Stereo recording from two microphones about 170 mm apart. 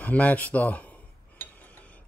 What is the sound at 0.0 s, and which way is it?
Speech, 10° left (ahead or behind).